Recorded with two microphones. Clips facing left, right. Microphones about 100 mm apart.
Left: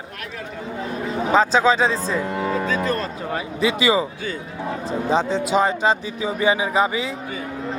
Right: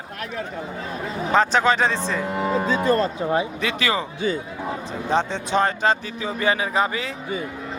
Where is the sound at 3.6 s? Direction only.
15° left (ahead or behind).